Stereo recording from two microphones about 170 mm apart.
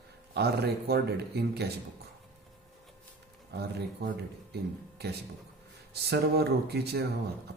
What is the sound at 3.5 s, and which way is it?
Speech, 70° right (ahead or behind).